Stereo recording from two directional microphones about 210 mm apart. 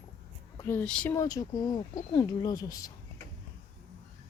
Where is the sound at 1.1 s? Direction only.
15° left (ahead or behind).